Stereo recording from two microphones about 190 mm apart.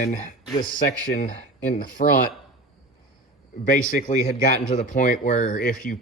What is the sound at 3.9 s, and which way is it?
A man's voice, 35° left (ahead or behind).